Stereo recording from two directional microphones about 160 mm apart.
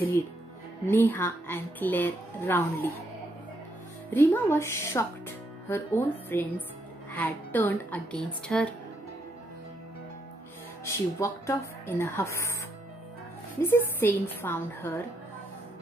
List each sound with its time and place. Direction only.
0.8 s speech: 10° left (ahead or behind)
4.1 s speech: 15° left (ahead or behind)
10.9 s speech: 20° left (ahead or behind)
13.6 s speech: 15° left (ahead or behind)